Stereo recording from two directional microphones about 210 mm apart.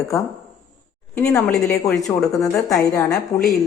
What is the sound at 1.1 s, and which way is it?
A woman's voice, 15° left (ahead or behind).